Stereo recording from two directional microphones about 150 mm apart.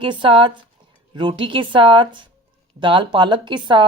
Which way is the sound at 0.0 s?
35° right (ahead or behind).